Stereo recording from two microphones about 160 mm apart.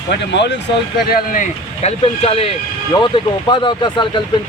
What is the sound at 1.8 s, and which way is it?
Speech, 40° left (ahead or behind).